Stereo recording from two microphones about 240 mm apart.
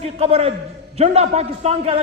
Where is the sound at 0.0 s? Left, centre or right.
Right.